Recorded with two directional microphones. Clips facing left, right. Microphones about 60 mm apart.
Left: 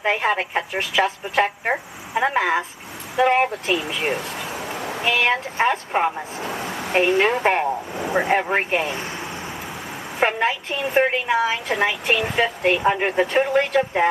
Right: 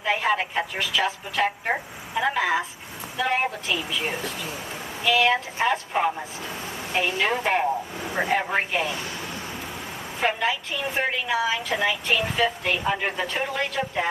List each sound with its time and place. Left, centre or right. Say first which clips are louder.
0.0 s a woman's voice: left 2 dB; left
4.7 s a sound: left 6 dB; left
5.0 s a woman's voice: even; left
6.6 s a woman's voice: left 6 dB; left
10.2 s a woman's voice: left 4 dB; left